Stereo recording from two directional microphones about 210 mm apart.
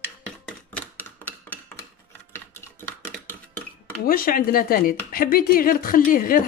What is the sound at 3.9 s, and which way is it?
Speech, 45° left (ahead or behind).